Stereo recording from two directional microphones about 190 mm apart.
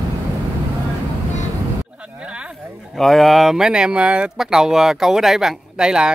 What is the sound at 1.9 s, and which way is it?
Speech, 5° right (ahead or behind).